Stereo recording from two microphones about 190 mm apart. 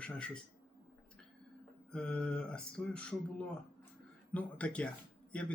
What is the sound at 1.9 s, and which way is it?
Speech, 5° left (ahead or behind).